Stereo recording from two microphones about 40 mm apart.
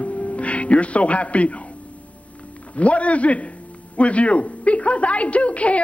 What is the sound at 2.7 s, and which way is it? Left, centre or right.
A woman's voice, left.